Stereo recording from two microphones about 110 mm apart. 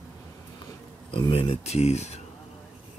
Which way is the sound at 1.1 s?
50° left (ahead or behind).